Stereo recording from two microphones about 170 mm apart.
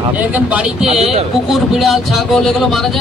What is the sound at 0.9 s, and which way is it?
Speech, 35° right (ahead or behind).